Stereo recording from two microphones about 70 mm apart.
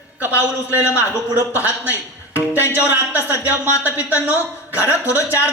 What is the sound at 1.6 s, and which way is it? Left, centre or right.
A man's voice, right.